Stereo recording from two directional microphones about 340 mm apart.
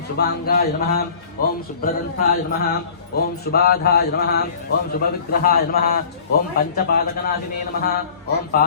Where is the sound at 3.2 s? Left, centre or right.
Left.